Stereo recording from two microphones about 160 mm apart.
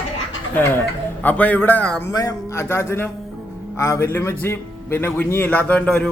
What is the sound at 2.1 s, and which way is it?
Speech, 20° left (ahead or behind).